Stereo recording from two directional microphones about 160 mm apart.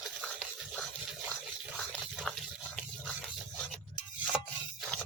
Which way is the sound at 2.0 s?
Centre (ahead or behind).